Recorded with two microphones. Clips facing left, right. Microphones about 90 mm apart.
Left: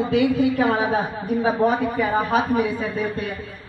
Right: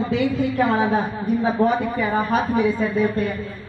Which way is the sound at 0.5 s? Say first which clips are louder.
Right 1 dB; 5° left (ahead or behind).